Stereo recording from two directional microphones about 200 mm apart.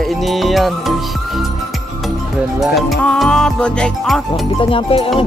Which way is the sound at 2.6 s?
Centre (ahead or behind).